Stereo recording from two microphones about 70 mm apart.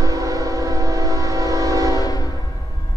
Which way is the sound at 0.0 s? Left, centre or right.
Right.